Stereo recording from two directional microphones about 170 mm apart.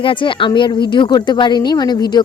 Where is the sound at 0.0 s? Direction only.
30° left (ahead or behind).